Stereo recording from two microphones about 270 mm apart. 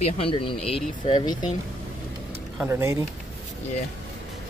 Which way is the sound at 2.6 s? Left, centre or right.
Centre.